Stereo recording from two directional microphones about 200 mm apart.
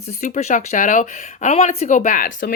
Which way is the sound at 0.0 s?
35° left (ahead or behind).